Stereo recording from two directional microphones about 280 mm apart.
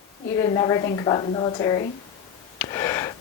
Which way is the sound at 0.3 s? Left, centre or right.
Centre.